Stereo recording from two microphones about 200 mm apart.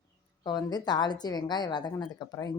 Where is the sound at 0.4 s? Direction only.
20° left (ahead or behind).